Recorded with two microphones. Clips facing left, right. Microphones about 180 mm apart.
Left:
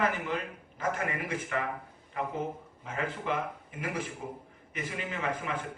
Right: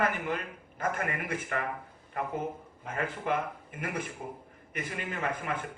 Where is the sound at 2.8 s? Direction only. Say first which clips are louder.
Right 1 dB; 50° right (ahead or behind).